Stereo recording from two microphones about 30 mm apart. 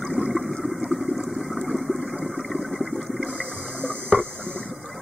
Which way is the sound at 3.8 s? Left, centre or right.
Centre.